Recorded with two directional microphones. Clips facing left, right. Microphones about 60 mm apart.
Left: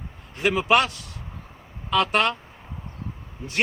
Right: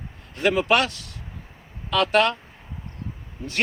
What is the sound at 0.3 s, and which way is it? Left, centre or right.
Speech, centre.